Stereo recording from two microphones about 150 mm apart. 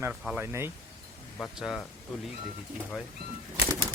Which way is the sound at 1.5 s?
Centre (ahead or behind).